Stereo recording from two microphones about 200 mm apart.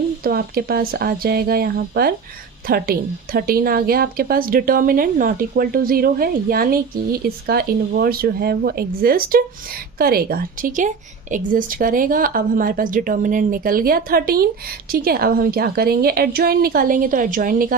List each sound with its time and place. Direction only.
0.2 s a woman's voice: 50° right (ahead or behind)